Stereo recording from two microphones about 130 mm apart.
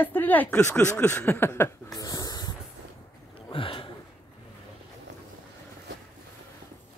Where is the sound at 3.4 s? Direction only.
40° left (ahead or behind).